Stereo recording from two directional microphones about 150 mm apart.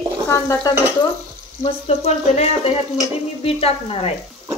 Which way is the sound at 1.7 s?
45° left (ahead or behind).